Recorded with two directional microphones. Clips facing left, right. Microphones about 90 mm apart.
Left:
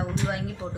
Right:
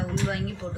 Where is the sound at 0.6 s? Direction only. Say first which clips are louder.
Even; 10° left (ahead or behind).